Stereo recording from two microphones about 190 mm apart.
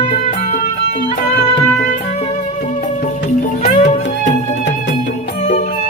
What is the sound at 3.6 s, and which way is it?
Music, 35° left (ahead or behind).